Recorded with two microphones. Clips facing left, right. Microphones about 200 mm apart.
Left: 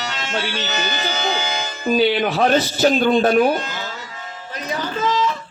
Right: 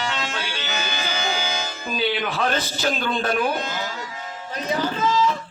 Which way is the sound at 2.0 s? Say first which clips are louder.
Left 6 dB; 45° left (ahead or behind).